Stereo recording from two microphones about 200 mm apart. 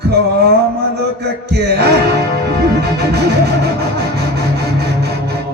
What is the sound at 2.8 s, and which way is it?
Music, 55° right (ahead or behind).